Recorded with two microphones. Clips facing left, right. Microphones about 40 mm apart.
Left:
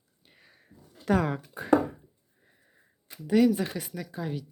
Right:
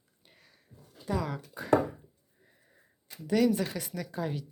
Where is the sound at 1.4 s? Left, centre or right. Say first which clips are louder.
Left 2 dB; centre.